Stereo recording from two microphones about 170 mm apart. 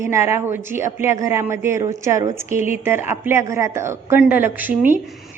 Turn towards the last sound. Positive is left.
turn(degrees=-10)  # may be behind; listen again after turning